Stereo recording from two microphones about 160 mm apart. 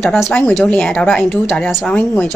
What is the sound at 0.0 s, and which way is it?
A woman's voice, 5° left (ahead or behind).